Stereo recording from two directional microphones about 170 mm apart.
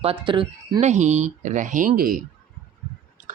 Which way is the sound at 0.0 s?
30° right (ahead or behind).